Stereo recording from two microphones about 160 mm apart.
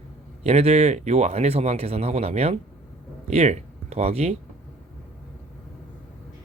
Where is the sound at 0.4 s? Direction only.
40° right (ahead or behind).